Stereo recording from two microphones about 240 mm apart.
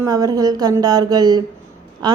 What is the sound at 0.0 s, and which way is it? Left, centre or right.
Speech, centre.